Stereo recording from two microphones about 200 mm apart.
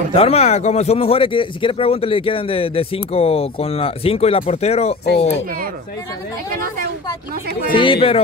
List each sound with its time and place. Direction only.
0.1 s speech: 30° left (ahead or behind)
7.7 s speech: 25° left (ahead or behind)